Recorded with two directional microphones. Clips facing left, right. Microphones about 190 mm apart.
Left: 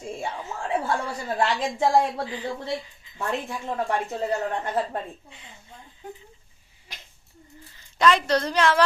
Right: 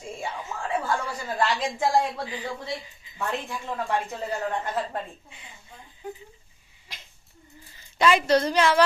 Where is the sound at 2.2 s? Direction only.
10° right (ahead or behind).